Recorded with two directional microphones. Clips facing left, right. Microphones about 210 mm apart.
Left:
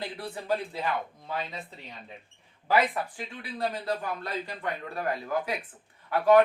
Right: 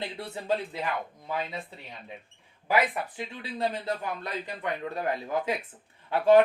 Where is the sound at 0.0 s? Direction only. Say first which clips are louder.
Even; 25° right (ahead or behind).